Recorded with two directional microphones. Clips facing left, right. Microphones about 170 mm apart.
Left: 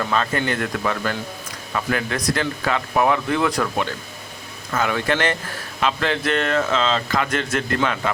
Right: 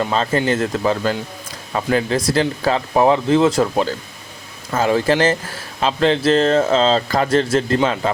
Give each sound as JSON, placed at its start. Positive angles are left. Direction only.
{"t": 0.0, "sound": "speech", "side_deg": -25}